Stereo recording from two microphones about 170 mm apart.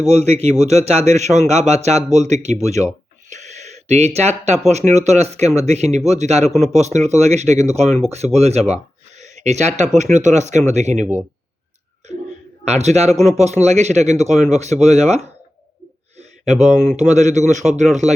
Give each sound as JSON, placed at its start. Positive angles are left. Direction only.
{"t": 0.0, "sound": "a man's voice", "side_deg": -40}
{"t": 11.0, "sound": "speech", "side_deg": -10}
{"t": 12.6, "sound": "a man's voice", "side_deg": -40}
{"t": 17.1, "sound": "speech", "side_deg": -45}